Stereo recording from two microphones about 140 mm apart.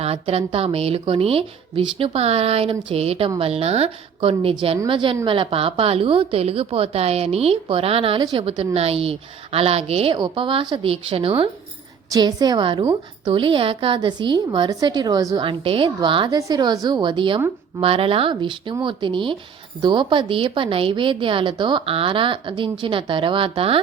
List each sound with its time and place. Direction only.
0.0 s a woman's voice: 45° right (ahead or behind)
12.1 s a woman's voice: 30° right (ahead or behind)
15.4 s a woman's voice: 40° right (ahead or behind)